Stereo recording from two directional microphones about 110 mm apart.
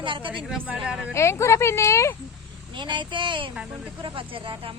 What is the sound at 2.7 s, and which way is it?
Speech, 45° right (ahead or behind).